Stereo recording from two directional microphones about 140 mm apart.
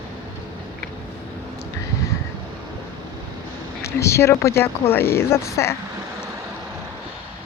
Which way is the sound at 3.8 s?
20° left (ahead or behind).